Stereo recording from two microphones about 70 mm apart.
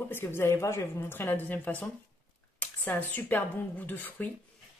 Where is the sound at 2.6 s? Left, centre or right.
Left.